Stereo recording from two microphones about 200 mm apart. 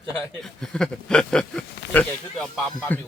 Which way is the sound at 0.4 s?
Centre (ahead or behind).